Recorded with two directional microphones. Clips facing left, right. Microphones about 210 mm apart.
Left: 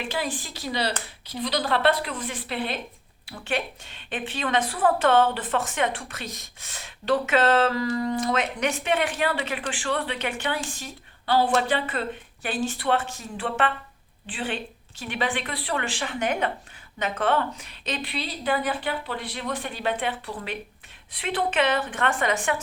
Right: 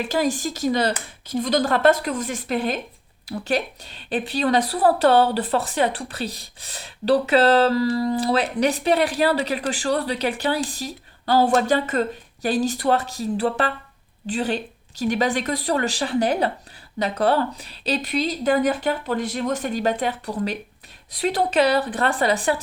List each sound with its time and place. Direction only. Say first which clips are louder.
0.1 s a woman's voice: right 8 dB; 40° right (ahead or behind)